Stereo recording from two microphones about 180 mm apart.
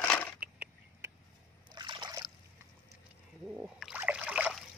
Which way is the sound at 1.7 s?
25° right (ahead or behind).